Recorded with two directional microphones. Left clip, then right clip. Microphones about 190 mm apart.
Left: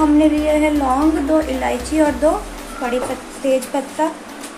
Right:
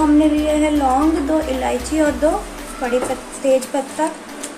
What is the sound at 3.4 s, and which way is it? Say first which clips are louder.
Speech: right 2 dB; centre (ahead or behind).